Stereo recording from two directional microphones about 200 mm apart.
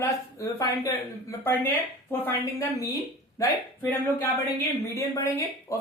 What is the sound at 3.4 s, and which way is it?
Speech, 10° left (ahead or behind).